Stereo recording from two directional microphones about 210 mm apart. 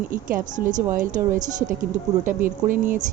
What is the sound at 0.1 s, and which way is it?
A woman's voice, 40° right (ahead or behind).